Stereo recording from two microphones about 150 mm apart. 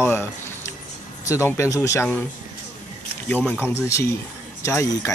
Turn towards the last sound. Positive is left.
turn(degrees=20)  # may be behind; listen again after turning